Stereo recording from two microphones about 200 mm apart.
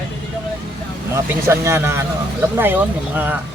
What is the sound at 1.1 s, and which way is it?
Speech, 15° right (ahead or behind).